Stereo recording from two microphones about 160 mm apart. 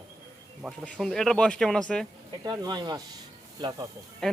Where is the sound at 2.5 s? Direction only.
25° right (ahead or behind).